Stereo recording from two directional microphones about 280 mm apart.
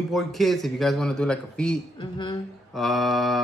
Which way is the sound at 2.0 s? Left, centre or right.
Centre.